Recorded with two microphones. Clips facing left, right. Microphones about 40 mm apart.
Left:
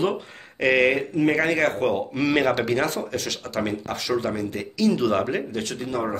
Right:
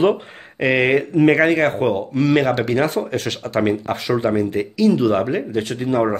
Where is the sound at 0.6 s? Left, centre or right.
Centre.